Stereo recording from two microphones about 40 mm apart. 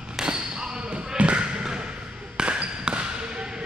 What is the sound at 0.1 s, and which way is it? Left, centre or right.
Basketball bounce, centre.